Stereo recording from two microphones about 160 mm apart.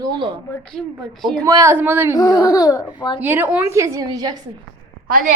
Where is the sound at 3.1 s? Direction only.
10° right (ahead or behind).